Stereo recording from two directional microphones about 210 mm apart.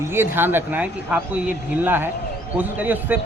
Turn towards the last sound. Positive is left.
turn(degrees=-10)  # may be behind; listen again after turning